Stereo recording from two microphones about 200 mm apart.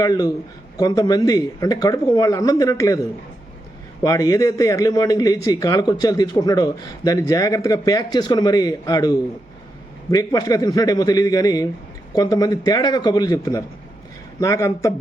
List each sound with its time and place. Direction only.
0.0 s a man's voice: 20° left (ahead or behind)
4.0 s a man's voice: 15° left (ahead or behind)